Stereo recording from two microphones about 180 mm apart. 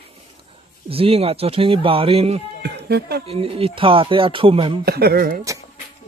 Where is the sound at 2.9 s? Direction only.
60° right (ahead or behind).